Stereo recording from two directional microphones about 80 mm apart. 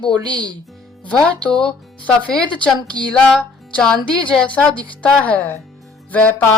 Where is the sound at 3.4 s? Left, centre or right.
Centre.